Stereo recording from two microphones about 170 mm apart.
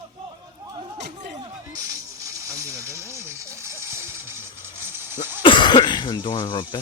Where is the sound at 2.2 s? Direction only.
15° right (ahead or behind).